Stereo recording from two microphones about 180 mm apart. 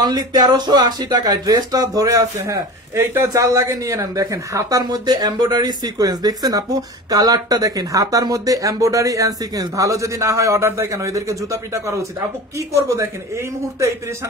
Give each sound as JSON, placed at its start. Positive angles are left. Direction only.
{"t": 0.0, "sound": "speech", "side_deg": -20}